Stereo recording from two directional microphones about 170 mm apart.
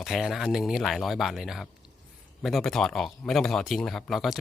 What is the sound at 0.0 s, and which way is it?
Speech, centre (ahead or behind).